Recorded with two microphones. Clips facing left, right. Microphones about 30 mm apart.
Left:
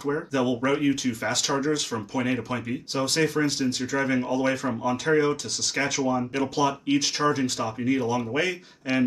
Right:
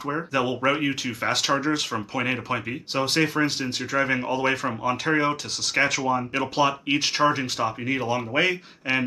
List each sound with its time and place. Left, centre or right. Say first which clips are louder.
0.0 s speech: even; right